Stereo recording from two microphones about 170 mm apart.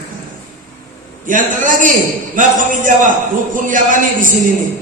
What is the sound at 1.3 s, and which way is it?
A man's voice, 50° right (ahead or behind).